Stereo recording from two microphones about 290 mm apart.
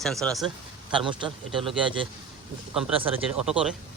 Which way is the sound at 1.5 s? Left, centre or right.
Centre.